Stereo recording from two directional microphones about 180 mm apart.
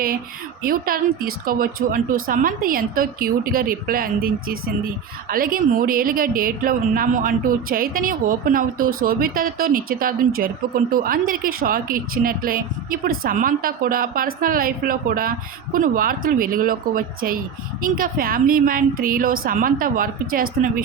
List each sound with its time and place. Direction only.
0.6 s a woman's voice: 55° right (ahead or behind)